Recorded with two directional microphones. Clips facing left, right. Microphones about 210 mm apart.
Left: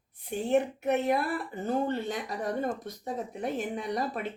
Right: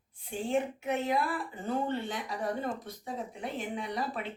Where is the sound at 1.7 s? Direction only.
40° left (ahead or behind).